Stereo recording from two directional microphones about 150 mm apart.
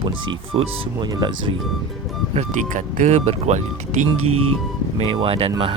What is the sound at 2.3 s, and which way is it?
Speech, 50° right (ahead or behind).